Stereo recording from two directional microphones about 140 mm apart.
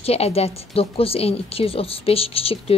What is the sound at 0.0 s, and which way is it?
A woman's voice, 45° left (ahead or behind).